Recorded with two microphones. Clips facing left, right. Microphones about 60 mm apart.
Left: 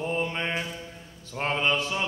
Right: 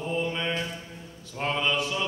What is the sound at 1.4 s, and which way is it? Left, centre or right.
Mantra, left.